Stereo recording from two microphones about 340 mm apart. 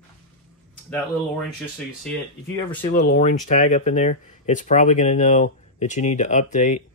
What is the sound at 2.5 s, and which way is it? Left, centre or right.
Speech, centre.